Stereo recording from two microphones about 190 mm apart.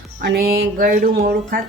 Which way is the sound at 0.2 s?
55° right (ahead or behind).